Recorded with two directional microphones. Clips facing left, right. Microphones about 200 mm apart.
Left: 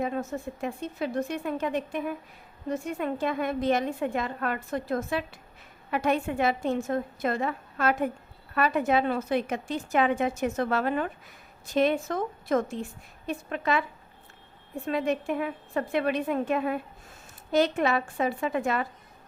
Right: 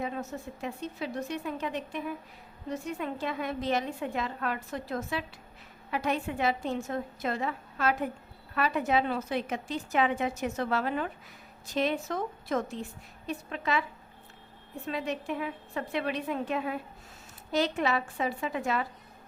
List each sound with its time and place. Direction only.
0.0 s a woman's voice: 50° left (ahead or behind)
14.8 s a woman's voice: 50° left (ahead or behind)